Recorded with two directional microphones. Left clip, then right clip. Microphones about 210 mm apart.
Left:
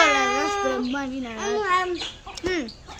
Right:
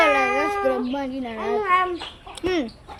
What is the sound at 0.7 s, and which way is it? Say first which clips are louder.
Cat: right 2 dB; 5° left (ahead or behind).